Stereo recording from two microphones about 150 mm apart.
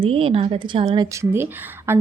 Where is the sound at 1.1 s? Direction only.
15° right (ahead or behind).